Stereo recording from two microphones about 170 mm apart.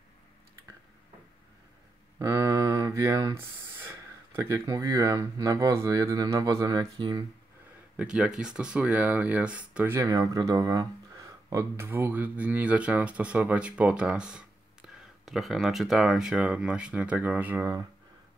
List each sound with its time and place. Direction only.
2.1 s speech: 20° right (ahead or behind)
8.0 s speech: 5° right (ahead or behind)